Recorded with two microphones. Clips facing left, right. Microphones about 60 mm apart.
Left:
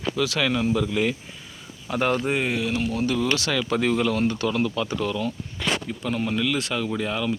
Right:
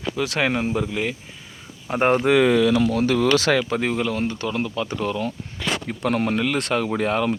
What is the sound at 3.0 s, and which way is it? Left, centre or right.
Speech, right.